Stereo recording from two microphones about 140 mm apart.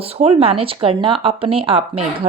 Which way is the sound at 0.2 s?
45° right (ahead or behind).